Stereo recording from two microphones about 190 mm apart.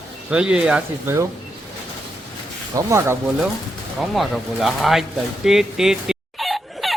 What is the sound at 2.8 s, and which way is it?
Speech, 15° right (ahead or behind).